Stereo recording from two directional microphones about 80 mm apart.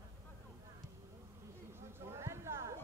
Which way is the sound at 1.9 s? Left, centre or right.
Right.